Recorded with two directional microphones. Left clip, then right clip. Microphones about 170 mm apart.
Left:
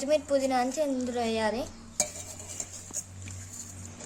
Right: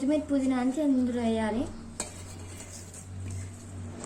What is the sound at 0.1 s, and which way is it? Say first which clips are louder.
A woman's voice: left 4 dB; 90° left.